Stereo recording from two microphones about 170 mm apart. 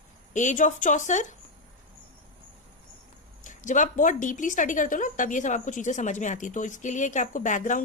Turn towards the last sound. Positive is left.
turn(degrees=50)  # may be behind; listen again after turning